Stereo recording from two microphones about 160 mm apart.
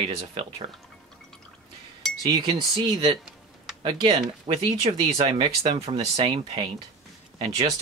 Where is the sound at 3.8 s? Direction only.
30° right (ahead or behind).